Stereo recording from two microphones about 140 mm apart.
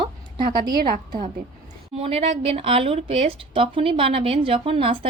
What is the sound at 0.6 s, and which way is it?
Speech, 35° right (ahead or behind).